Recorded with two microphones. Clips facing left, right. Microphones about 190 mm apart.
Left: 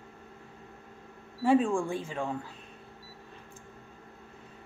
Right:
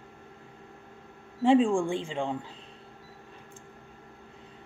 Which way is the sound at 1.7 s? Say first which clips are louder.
Right 3 dB; 30° right (ahead or behind).